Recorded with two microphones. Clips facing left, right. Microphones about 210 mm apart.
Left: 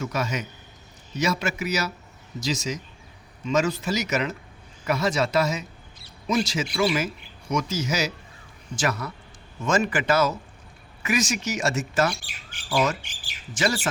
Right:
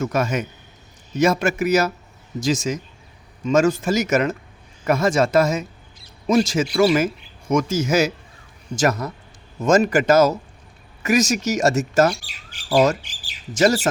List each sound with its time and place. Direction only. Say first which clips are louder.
0.0 s speech: right 6 dB; 50° right (ahead or behind)